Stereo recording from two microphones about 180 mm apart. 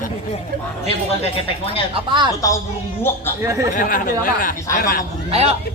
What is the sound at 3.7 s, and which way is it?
Speech, 50° left (ahead or behind).